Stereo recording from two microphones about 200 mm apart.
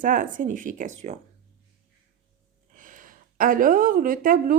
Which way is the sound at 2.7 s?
40° right (ahead or behind).